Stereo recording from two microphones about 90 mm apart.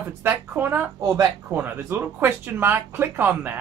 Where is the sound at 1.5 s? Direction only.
25° right (ahead or behind).